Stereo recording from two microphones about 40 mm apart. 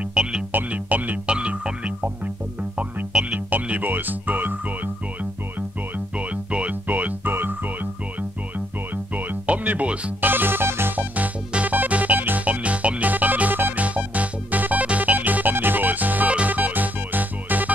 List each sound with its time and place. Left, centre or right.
0.1 s music: right
0.7 s music: right
1.2 s music: right
3.1 s music: right
3.3 s music: right
6.1 s music: right
7.2 s music: right
9.5 s music: right
10.2 s music: right
11.0 s music: right
13.8 s music: right